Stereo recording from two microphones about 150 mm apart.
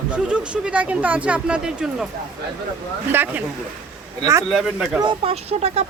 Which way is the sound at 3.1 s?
10° right (ahead or behind).